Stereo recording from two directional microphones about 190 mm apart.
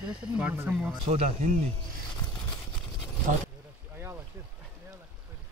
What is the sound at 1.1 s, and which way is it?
Speech, 40° right (ahead or behind).